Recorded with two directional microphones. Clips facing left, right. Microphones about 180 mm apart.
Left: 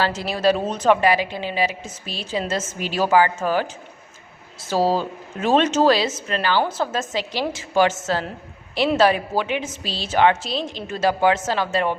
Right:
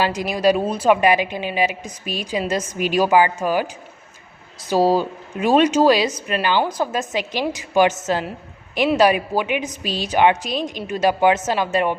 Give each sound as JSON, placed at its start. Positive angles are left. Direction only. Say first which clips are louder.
{"t": 0.0, "sound": "a woman's voice", "louder": "right 2 dB", "side_deg": -15}
{"t": 4.7, "sound": "a woman's voice", "louder": "right 3 dB", "side_deg": -15}